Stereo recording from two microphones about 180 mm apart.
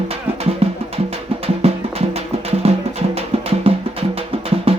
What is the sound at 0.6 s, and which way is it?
Music, 35° right (ahead or behind).